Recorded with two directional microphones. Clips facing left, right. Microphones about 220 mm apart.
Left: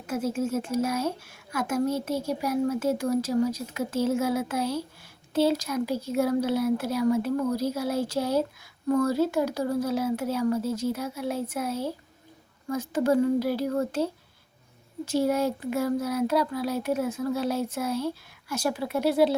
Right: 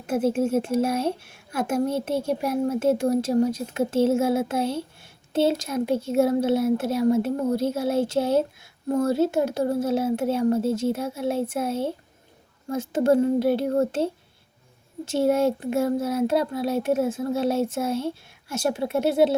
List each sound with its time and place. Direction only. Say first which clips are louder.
0.1 s speech: right 5 dB; 30° right (ahead or behind)
15.1 s speech: right 4 dB; 25° right (ahead or behind)